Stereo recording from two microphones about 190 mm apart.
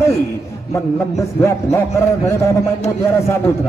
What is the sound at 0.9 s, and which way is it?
A man's voice, 15° left (ahead or behind).